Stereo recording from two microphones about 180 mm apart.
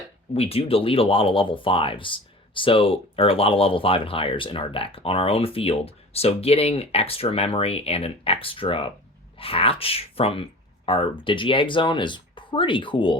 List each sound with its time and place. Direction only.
0.3 s speech: 35° left (ahead or behind)